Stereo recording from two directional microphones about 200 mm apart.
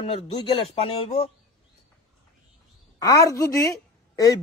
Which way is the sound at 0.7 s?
30° left (ahead or behind).